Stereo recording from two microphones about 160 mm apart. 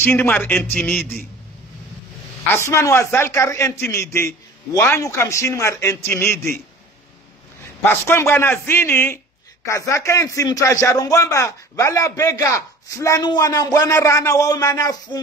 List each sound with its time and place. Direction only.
0.0 s a man's voice: 15° left (ahead or behind)
2.5 s a man's voice: 15° left (ahead or behind)
7.8 s a man's voice: 15° left (ahead or behind)